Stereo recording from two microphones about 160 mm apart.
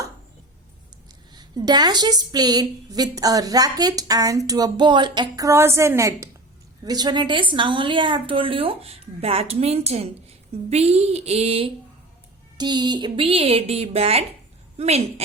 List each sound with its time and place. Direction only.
1.3 s a woman's voice: 25° right (ahead or behind)
12.5 s a woman's voice: 25° right (ahead or behind)